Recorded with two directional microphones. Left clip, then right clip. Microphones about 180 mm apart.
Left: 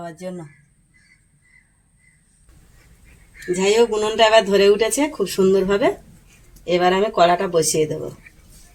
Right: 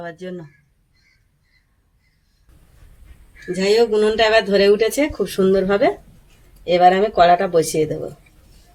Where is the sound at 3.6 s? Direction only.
35° left (ahead or behind).